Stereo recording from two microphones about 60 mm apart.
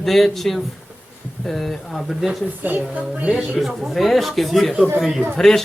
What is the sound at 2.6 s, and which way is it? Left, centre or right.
Speech, right.